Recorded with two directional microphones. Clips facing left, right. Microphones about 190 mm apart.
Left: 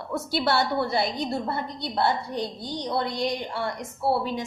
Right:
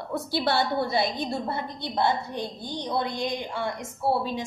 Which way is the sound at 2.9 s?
15° right (ahead or behind).